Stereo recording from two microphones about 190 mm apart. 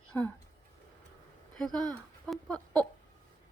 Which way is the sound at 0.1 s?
10° left (ahead or behind).